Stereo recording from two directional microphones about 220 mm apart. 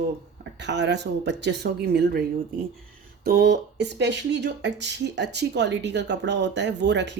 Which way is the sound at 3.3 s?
50° right (ahead or behind).